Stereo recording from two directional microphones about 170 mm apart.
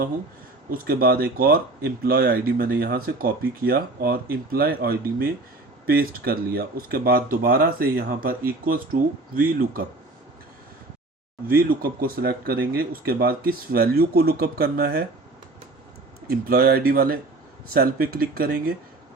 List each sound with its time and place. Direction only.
0.7 s speech: 60° right (ahead or behind)
11.4 s speech: 60° right (ahead or behind)
16.2 s speech: 65° right (ahead or behind)